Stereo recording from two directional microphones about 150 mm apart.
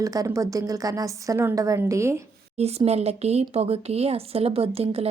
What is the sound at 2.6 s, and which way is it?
Speech, 45° right (ahead or behind).